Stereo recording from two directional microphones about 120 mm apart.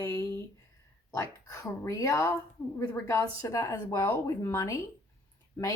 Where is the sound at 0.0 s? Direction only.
20° left (ahead or behind).